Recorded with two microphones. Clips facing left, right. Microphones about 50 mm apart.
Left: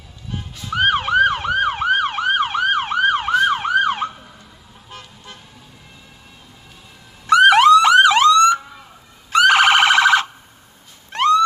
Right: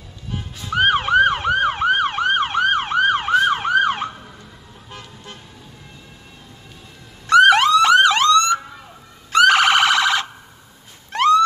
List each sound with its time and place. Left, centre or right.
0.7 s emergency vehicle: centre
4.8 s car: centre
7.2 s police car: centre
9.4 s siren: centre
11.1 s cat: centre